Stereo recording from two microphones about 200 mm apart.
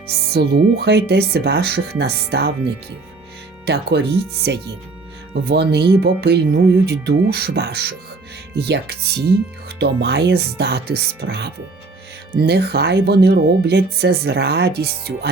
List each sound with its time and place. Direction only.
0.3 s speech: 55° right (ahead or behind)